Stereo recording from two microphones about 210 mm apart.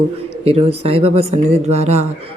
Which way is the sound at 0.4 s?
30° right (ahead or behind).